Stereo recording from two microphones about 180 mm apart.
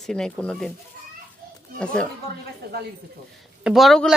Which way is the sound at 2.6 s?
65° right (ahead or behind).